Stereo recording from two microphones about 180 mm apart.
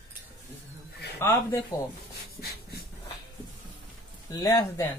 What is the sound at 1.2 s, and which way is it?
Speech, 15° left (ahead or behind).